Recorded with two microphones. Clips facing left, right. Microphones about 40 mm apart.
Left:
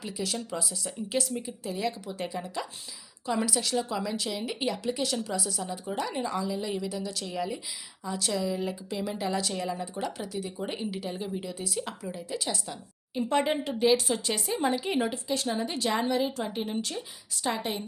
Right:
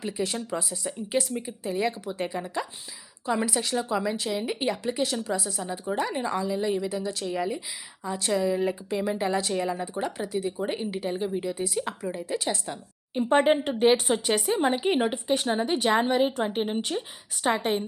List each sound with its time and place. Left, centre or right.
0.0 s speech: right
13.3 s speech: right
14.3 s a woman's voice: right
14.6 s a woman's voice: right